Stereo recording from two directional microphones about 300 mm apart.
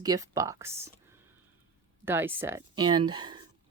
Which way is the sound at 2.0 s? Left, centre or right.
Centre.